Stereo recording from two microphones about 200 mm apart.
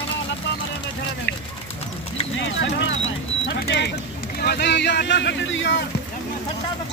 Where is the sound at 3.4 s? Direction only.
55° left (ahead or behind).